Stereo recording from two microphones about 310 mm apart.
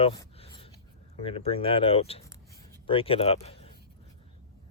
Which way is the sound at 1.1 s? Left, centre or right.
Centre.